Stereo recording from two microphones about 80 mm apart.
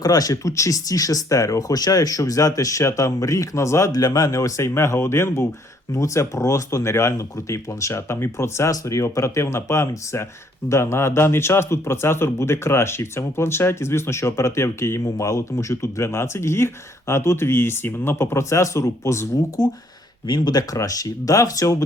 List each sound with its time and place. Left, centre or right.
0.0 s speech: left
19.6 s speech: left
20.7 s speech: left